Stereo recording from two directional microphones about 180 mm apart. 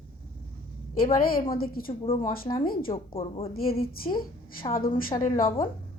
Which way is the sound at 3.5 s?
55° left (ahead or behind).